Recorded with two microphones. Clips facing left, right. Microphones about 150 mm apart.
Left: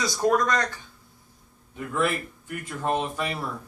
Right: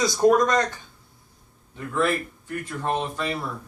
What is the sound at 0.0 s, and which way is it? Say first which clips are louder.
Speech: right 5 dB; 15° right (ahead or behind).